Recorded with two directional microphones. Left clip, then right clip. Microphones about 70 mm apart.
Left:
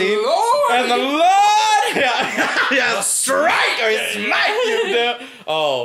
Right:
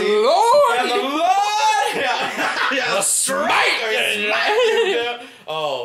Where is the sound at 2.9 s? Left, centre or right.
Centre.